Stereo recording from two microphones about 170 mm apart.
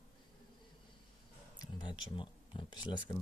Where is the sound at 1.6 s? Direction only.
25° left (ahead or behind).